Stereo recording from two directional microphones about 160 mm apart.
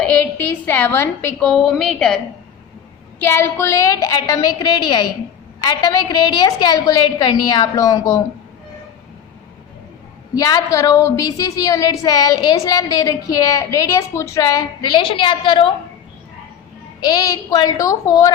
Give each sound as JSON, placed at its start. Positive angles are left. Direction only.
{"t": 0.6, "sound": "a woman's voice", "side_deg": 10}
{"t": 1.4, "sound": "a woman's voice", "side_deg": 0}
{"t": 3.2, "sound": "a woman's voice", "side_deg": 15}
{"t": 10.3, "sound": "a woman's voice", "side_deg": 20}
{"t": 17.1, "sound": "a woman's voice", "side_deg": 25}